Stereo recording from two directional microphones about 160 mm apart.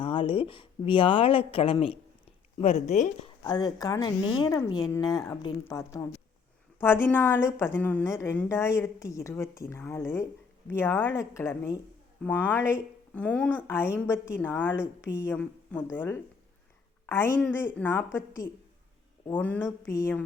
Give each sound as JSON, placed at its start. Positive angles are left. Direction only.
{"t": 0.0, "sound": "a woman's voice", "side_deg": 35}
{"t": 3.4, "sound": "speech", "side_deg": 25}